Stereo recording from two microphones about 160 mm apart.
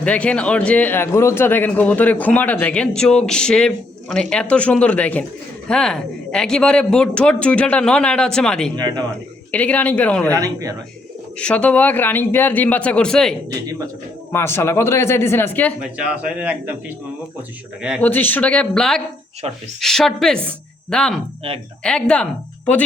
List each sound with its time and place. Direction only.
0.0 s a man's voice: 10° left (ahead or behind)
8.7 s speech: 25° right (ahead or behind)
9.5 s a man's voice: 10° left (ahead or behind)
10.3 s speech: 20° right (ahead or behind)
11.3 s a man's voice: 5° left (ahead or behind)
13.7 s speech: 20° right (ahead or behind)
14.3 s a man's voice: 15° left (ahead or behind)
15.8 s speech: 5° right (ahead or behind)
18.0 s a man's voice: 10° left (ahead or behind)